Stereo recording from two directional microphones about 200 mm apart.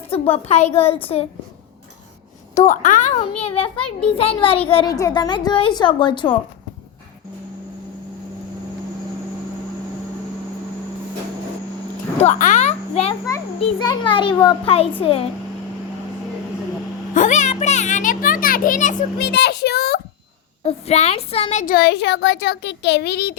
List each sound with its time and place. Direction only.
0.1 s a woman's voice: 30° left (ahead or behind)
2.6 s a woman's voice: 40° left (ahead or behind); by 6.3 s 25° left (ahead or behind)
12.2 s a sound: 40° left (ahead or behind)
13.6 s a woman's voice: 25° left (ahead or behind)
17.2 s children playing: 35° left (ahead or behind)
19.2 s a child's voice: 55° left (ahead or behind)
20.7 s a woman's voice: 30° left (ahead or behind); by 23.3 s 55° left (ahead or behind)